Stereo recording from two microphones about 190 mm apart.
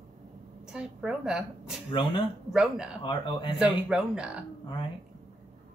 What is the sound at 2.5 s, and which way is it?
Speech, 5° right (ahead or behind).